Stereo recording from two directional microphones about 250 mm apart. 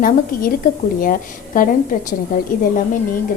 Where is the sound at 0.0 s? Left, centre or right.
Left.